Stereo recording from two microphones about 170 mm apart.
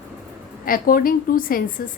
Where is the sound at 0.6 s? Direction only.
55° left (ahead or behind).